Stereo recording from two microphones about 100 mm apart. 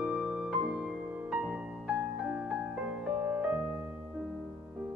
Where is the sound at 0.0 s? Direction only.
15° right (ahead or behind).